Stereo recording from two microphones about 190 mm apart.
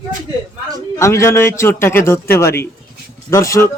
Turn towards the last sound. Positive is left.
turn(degrees=15)  # may be behind; listen again after turning